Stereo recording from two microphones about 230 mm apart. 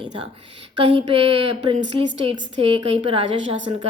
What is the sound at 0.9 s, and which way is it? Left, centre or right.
A woman's voice, right.